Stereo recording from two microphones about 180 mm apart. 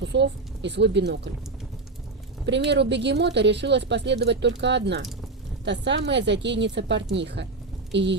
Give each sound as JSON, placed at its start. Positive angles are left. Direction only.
{"t": 0.0, "sound": "speech", "side_deg": -75}
{"t": 2.5, "sound": "speech", "side_deg": -70}